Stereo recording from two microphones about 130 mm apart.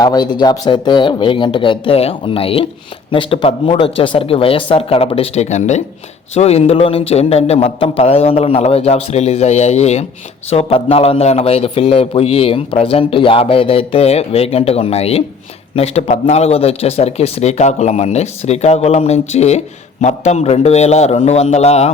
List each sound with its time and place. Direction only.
0.0 s a man's voice: 30° left (ahead or behind); by 21.8 s 55° left (ahead or behind)